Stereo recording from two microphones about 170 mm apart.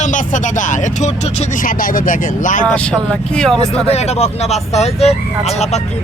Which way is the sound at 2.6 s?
5° left (ahead or behind).